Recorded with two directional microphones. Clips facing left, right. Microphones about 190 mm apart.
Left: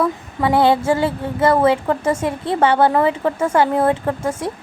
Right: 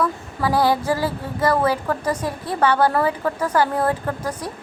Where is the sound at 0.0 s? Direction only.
25° left (ahead or behind).